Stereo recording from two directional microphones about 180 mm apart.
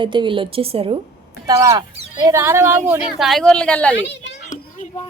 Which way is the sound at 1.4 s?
20° right (ahead or behind).